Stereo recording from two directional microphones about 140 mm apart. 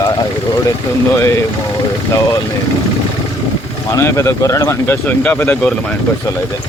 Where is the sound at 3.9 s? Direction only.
20° left (ahead or behind).